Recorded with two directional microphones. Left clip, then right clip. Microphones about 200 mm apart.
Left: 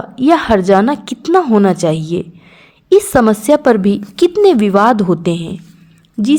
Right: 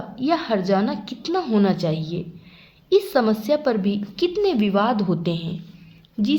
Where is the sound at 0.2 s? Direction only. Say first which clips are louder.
Left 11 dB; 40° left (ahead or behind).